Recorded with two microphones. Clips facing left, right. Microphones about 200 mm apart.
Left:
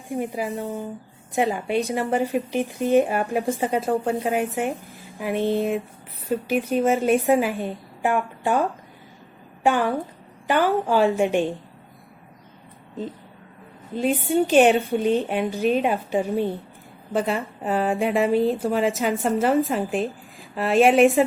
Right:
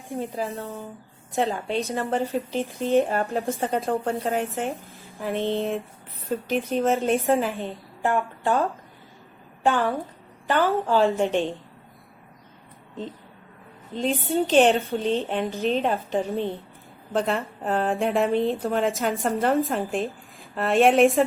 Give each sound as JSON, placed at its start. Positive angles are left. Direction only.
{"t": 0.1, "sound": "a woman's voice", "side_deg": 15}
{"t": 3.7, "sound": "a woman's voice", "side_deg": 0}
{"t": 4.2, "sound": "a woman's voice", "side_deg": 15}
{"t": 13.9, "sound": "a woman's voice", "side_deg": 10}